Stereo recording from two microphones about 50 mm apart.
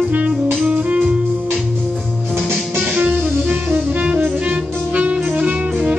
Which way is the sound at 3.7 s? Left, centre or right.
Right.